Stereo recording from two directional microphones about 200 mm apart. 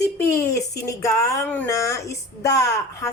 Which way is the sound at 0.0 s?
15° left (ahead or behind).